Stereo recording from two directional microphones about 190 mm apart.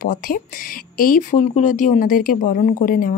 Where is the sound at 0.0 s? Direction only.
45° left (ahead or behind).